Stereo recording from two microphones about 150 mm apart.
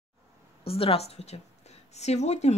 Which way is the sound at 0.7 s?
40° left (ahead or behind).